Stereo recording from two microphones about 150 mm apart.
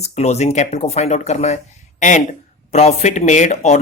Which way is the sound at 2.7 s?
45° left (ahead or behind).